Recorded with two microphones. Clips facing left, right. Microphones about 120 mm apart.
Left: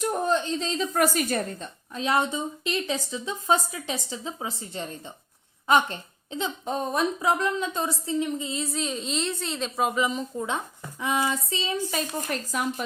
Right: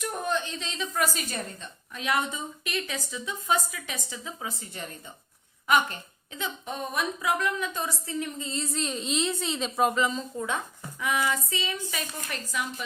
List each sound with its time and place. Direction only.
0.0 s a woman's voice: 30° left (ahead or behind); by 9.9 s centre (ahead or behind)
9.9 s speech: 15° left (ahead or behind); by 12.8 s 45° left (ahead or behind)